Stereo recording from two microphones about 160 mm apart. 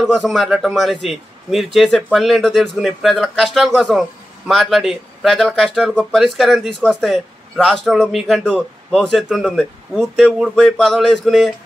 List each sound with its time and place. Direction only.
0.0 s speech: centre (ahead or behind)